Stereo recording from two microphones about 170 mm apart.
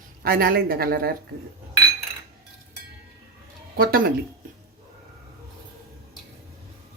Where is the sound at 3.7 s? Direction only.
60° right (ahead or behind).